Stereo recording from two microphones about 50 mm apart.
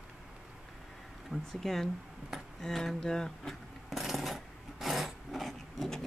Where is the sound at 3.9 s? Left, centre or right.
Centre.